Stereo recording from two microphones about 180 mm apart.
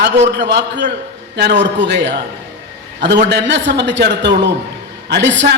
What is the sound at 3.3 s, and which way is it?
A man's voice, 75° right (ahead or behind).